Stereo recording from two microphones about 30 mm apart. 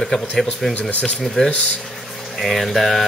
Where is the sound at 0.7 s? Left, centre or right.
Left.